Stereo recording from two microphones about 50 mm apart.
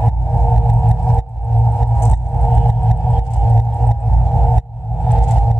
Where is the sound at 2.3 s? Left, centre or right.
Centre.